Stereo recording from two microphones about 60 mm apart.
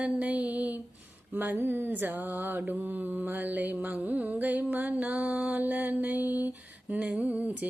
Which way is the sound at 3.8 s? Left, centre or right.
Right.